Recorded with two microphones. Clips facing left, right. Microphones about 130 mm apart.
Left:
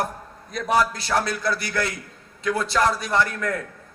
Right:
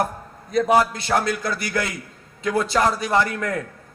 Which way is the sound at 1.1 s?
50° right (ahead or behind).